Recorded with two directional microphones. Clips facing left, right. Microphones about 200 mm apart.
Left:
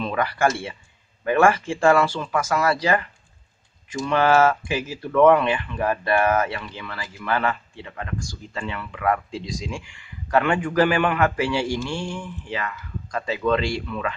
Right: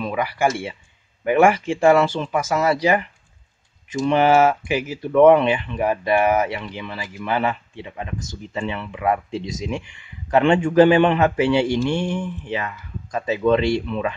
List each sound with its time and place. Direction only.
0.0 s speech: 10° right (ahead or behind)